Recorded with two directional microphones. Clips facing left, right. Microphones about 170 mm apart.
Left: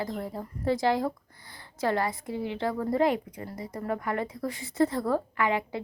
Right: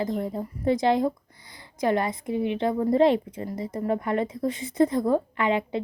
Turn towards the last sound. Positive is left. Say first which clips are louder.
# right 3 dB
turn(degrees=-25)  # may be behind; listen again after turning